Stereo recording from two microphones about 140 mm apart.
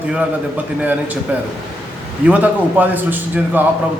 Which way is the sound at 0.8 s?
10° right (ahead or behind).